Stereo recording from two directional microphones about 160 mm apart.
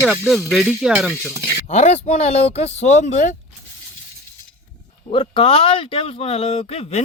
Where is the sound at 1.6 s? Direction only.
45° left (ahead or behind).